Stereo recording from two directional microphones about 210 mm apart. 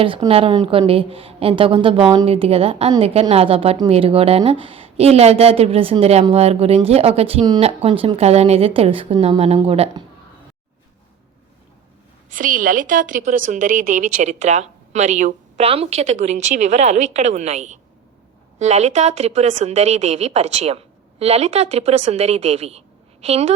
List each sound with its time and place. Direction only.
0.0 s a woman's voice: 25° right (ahead or behind)
12.3 s a woman's voice: 40° right (ahead or behind)